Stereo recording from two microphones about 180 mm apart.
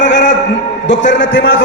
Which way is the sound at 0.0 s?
80° left.